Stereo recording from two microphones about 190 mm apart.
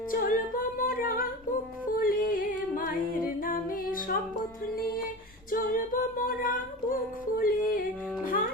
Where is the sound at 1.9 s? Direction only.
50° left (ahead or behind).